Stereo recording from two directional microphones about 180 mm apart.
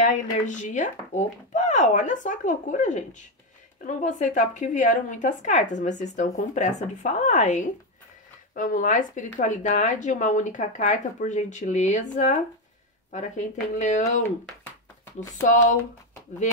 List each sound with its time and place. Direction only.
0.0 s a woman's voice: 45° left (ahead or behind)
14.2 s speech: 10° left (ahead or behind)